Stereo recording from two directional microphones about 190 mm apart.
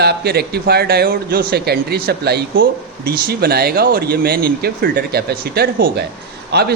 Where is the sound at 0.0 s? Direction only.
55° right (ahead or behind).